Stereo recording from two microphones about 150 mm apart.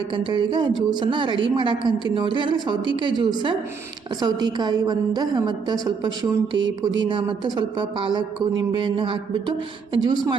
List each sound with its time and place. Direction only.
0.1 s a woman's voice: 35° right (ahead or behind)